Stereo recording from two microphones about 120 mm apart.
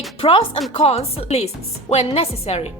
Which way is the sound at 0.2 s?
50° left (ahead or behind).